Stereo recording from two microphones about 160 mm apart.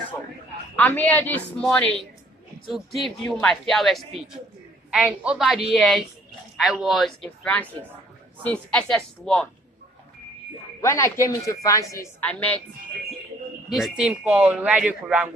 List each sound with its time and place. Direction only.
0.8 s a woman's voice: 10° left (ahead or behind)
10.8 s a woman's voice: 20° left (ahead or behind)
12.3 s a woman's voice: 10° left (ahead or behind)
13.7 s speech: centre (ahead or behind)